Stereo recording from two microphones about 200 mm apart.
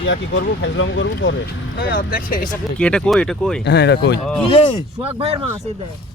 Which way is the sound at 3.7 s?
60° left (ahead or behind).